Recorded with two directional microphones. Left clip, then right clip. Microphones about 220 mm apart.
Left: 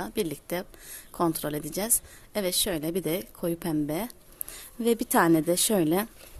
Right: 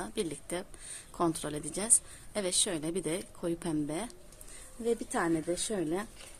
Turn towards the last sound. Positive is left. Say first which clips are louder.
# left 9 dB
turn(degrees=50)  # may be behind; listen again after turning